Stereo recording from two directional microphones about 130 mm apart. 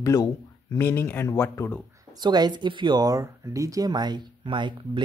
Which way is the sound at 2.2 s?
35° right (ahead or behind).